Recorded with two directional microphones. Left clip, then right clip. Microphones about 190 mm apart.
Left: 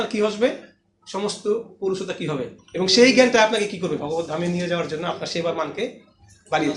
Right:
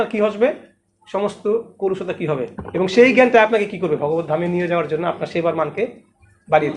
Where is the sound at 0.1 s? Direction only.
25° right (ahead or behind).